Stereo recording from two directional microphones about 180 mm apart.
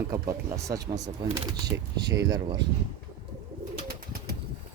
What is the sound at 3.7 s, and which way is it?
Bird, 55° right (ahead or behind).